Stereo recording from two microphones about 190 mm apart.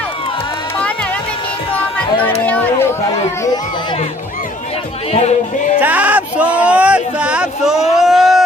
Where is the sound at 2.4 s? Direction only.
10° left (ahead or behind).